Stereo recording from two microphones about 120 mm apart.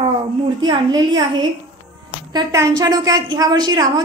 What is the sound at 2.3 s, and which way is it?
A woman's voice, 30° right (ahead or behind).